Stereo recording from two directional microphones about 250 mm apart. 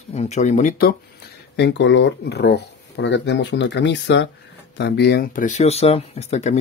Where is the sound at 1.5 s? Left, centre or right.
Left.